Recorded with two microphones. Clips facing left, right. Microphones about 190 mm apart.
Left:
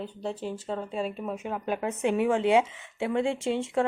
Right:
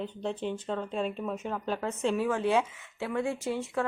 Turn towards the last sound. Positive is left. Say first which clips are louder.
# left 4 dB
turn(degrees=25)  # may be behind; listen again after turning